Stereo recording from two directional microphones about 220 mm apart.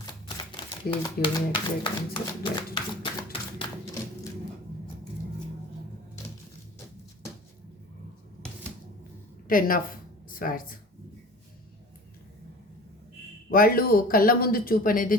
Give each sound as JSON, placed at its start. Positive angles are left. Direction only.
{"t": 0.0, "sound": "speech", "side_deg": 20}
{"t": 3.3, "sound": "typewriter", "side_deg": 25}
{"t": 9.5, "sound": "speech", "side_deg": 40}
{"t": 13.5, "sound": "speech", "side_deg": 40}